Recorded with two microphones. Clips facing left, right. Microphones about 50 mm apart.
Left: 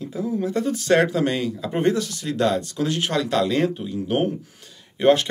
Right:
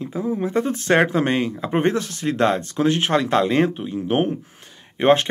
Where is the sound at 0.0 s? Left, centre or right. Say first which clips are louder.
Right 1 dB; right.